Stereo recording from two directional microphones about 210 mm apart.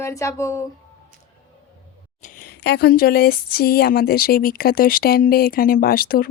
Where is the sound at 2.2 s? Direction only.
40° left (ahead or behind).